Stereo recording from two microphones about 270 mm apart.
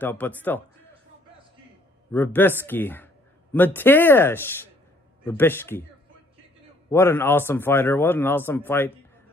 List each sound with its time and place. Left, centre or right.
0.0 s speech: centre
2.1 s speech: centre
6.9 s speech: centre